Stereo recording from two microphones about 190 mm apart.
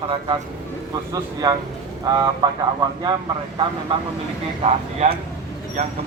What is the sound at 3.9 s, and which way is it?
Speech, 25° right (ahead or behind).